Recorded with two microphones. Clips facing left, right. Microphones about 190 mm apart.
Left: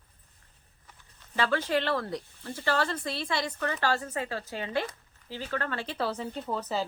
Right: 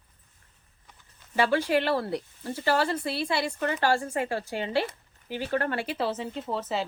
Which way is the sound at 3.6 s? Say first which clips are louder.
Right 5 dB; 20° right (ahead or behind).